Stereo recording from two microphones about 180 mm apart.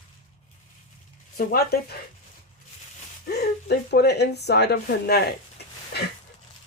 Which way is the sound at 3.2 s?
65° left (ahead or behind).